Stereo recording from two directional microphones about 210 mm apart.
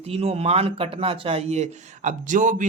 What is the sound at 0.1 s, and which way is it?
Speech, 30° right (ahead or behind).